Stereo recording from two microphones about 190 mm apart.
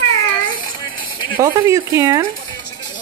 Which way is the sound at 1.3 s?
15° right (ahead or behind).